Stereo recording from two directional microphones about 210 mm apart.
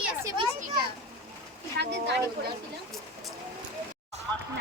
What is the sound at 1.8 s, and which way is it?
Speech, 55° right (ahead or behind).